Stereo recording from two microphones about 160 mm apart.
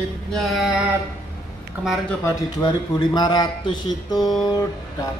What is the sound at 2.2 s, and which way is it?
A man's voice, 25° left (ahead or behind).